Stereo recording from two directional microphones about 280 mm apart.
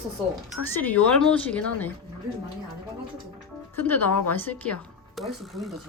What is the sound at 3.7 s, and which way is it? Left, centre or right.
A woman's voice, centre.